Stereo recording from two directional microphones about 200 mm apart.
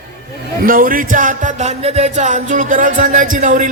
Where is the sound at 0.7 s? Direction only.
45° right (ahead or behind).